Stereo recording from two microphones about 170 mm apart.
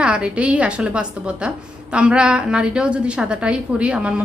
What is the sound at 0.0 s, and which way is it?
A woman's voice, 5° right (ahead or behind).